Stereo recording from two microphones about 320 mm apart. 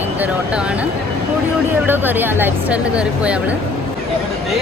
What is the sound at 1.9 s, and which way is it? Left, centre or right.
Speech, centre.